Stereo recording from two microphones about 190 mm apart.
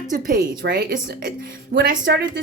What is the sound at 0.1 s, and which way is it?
Speech, 45° right (ahead or behind).